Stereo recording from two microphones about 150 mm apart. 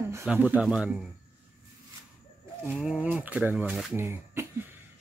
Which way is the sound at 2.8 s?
10° right (ahead or behind).